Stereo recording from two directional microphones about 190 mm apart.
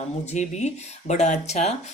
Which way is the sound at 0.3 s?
35° left (ahead or behind).